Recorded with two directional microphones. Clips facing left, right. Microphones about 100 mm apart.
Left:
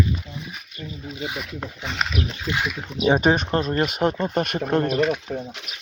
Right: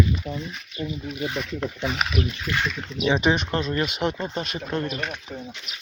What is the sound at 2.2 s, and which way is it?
Speech, 20° left (ahead or behind).